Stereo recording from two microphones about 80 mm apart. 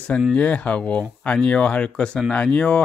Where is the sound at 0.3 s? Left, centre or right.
Centre.